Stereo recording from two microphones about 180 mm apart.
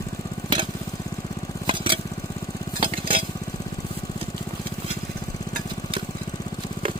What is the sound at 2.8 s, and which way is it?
Stir, 30° right (ahead or behind).